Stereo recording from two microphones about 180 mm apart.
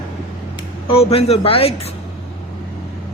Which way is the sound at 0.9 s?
35° left (ahead or behind).